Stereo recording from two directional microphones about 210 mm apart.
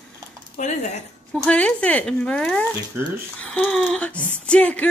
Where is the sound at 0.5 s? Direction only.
35° left (ahead or behind).